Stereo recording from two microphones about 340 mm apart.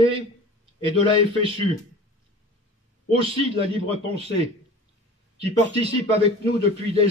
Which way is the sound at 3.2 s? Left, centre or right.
Centre.